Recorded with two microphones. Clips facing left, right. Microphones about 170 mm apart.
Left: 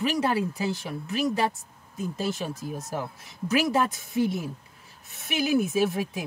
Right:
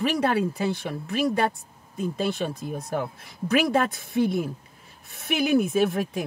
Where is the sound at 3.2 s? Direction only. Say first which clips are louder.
Right 1 dB; 60° right (ahead or behind).